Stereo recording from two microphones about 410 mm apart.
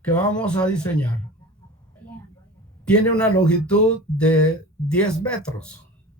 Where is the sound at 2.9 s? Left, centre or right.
Centre.